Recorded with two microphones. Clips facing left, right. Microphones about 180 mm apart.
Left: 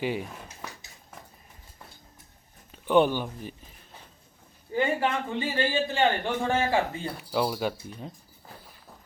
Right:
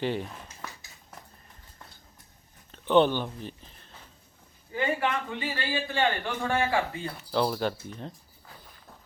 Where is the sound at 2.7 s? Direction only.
10° left (ahead or behind).